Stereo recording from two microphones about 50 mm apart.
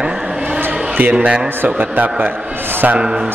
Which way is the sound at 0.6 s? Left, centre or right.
Right.